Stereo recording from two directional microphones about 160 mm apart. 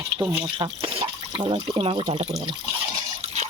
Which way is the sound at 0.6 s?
30° right (ahead or behind).